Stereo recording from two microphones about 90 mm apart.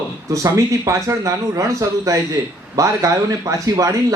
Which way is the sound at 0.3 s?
35° right (ahead or behind).